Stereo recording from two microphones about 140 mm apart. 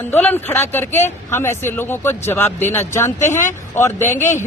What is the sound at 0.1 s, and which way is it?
A man's voice, 15° left (ahead or behind).